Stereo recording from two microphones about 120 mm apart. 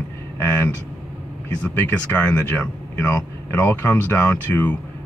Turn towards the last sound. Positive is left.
turn(degrees=15)  # may be behind; listen again after turning